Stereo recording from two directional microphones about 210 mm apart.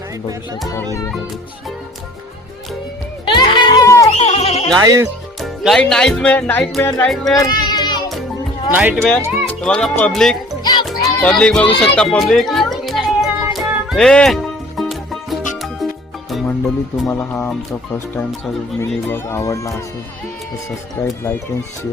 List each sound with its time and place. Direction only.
3.2 s music: 20° left (ahead or behind)
4.2 s music: 30° left (ahead or behind)
4.8 s speech: 15° right (ahead or behind)
5.4 s speech: centre (ahead or behind)
7.3 s music: 20° left (ahead or behind)
8.7 s speech: 5° right (ahead or behind)
10.6 s music: 20° left (ahead or behind)
11.0 s a sound: 5° left (ahead or behind)
13.5 s music: centre (ahead or behind)
16.3 s speech: centre (ahead or behind)
21.0 s speech: 10° left (ahead or behind)